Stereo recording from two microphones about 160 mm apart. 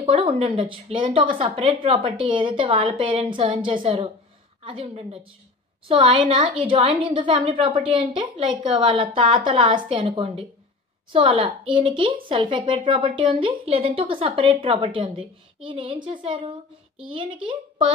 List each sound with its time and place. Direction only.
0.0 s a woman's voice: 35° right (ahead or behind)